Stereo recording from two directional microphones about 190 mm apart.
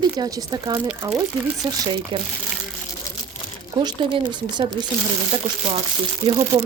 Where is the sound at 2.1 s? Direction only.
25° right (ahead or behind).